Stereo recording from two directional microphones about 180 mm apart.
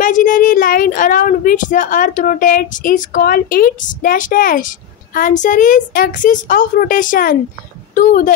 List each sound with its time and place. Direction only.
0.0 s a woman's voice: 45° left (ahead or behind)